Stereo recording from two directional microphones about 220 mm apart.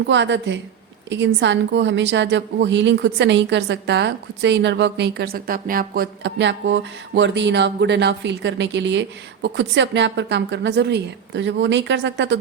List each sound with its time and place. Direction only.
0.0 s a woman's voice: 55° right (ahead or behind)